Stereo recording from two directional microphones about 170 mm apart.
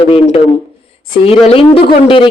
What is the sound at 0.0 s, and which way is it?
A woman's voice, 30° left (ahead or behind).